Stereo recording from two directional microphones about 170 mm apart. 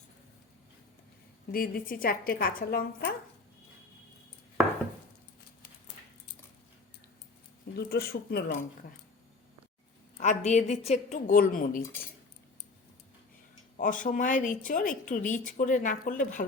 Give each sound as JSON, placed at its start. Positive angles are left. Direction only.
{"t": 1.5, "sound": "speech", "side_deg": 60}
{"t": 7.8, "sound": "speech", "side_deg": 70}
{"t": 10.2, "sound": "speech", "side_deg": 45}
{"t": 13.7, "sound": "speech", "side_deg": 50}